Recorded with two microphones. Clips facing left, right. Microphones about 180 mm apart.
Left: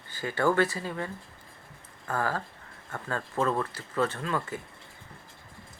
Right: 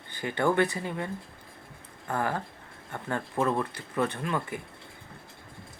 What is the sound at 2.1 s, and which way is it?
Speech, 20° right (ahead or behind).